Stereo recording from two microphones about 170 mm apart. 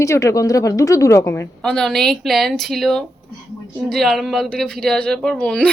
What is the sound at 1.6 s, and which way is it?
Speech, 5° left (ahead or behind).